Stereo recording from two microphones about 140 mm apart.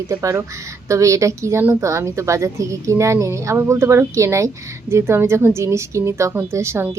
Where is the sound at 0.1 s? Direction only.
20° right (ahead or behind).